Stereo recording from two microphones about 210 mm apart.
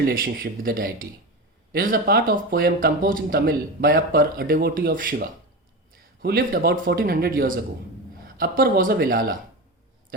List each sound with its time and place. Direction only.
0.1 s speech: 45° right (ahead or behind)